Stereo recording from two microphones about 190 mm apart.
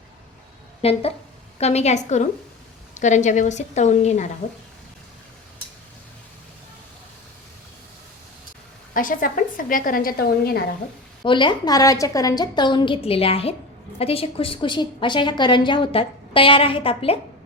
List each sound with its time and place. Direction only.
0.8 s a woman's voice: 30° left (ahead or behind)
8.9 s a woman's voice: 45° left (ahead or behind)
11.2 s a woman's voice: 25° left (ahead or behind)